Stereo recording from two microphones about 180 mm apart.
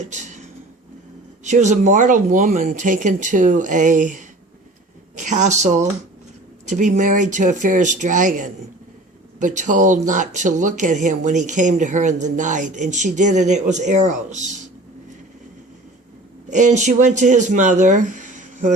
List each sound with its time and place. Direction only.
0.0 s a sound: 40° right (ahead or behind)
1.5 s speech: 40° right (ahead or behind)
16.5 s speech: 40° right (ahead or behind)